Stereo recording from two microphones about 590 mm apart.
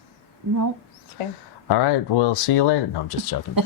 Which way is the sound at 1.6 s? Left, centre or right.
Left.